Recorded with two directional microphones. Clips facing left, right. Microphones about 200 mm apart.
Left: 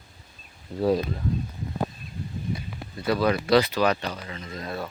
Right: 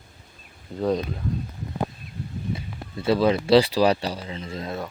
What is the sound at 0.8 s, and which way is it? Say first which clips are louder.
Speech: left 1 dB; 5° left (ahead or behind).